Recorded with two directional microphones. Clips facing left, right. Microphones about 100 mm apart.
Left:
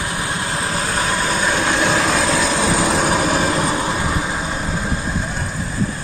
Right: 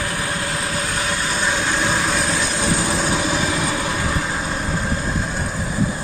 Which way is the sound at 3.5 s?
40° left (ahead or behind).